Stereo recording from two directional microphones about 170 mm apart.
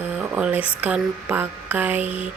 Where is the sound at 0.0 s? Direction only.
10° right (ahead or behind).